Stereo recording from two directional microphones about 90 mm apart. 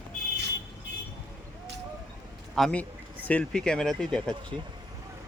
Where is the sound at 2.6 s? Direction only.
5° left (ahead or behind).